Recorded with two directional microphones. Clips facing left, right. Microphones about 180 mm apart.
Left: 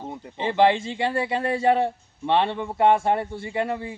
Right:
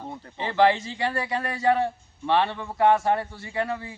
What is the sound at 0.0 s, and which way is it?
Speech, 20° left (ahead or behind).